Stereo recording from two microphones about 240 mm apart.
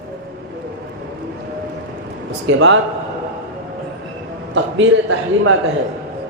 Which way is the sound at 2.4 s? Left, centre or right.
Right.